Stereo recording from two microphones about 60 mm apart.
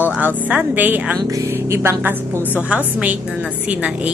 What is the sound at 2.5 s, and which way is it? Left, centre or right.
Speech, right.